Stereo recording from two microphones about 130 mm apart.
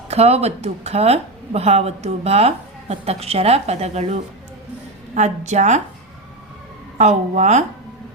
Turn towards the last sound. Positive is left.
turn(degrees=-65)  # may be behind; listen again after turning